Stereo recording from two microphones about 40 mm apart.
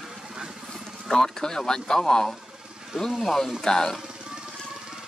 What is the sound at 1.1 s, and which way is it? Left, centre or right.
Speech, centre.